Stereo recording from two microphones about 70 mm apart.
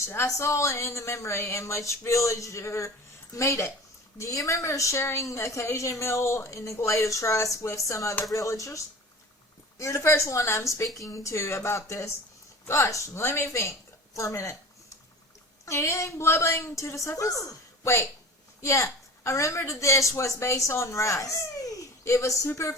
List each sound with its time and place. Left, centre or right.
0.0 s a woman's voice: left
15.6 s a woman's voice: left